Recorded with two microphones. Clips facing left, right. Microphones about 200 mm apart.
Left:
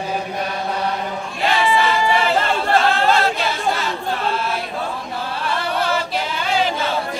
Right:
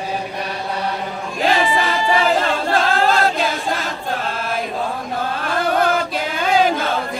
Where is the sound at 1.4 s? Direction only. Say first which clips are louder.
Even; 45° right (ahead or behind).